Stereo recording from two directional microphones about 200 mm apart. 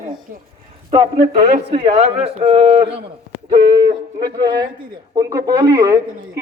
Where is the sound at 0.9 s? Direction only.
20° right (ahead or behind).